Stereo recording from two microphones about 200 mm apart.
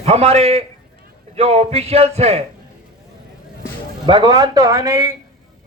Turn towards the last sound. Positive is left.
turn(degrees=-15)  # may be behind; listen again after turning